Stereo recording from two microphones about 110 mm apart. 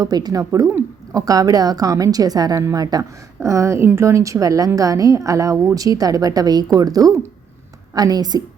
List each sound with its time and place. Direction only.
0.0 s a woman's voice: 35° right (ahead or behind)